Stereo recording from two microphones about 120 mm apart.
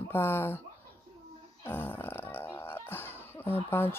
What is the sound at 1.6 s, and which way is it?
Speech, 20° left (ahead or behind).